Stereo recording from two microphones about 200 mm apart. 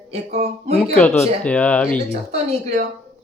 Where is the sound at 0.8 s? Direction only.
5° left (ahead or behind).